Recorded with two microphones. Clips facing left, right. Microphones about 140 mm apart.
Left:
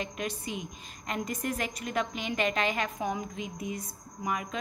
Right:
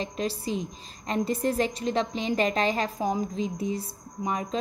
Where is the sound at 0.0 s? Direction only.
30° right (ahead or behind).